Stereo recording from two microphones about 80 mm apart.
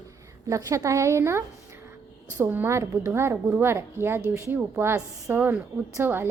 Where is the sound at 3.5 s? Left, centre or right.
Right.